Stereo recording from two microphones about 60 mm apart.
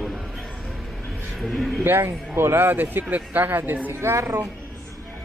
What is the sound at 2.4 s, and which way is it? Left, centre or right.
Speech, right.